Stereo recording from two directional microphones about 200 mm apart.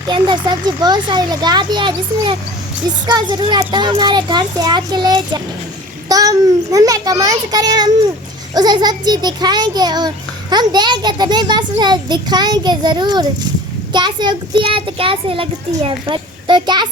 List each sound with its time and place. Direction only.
0.1 s a child's voice: 25° right (ahead or behind)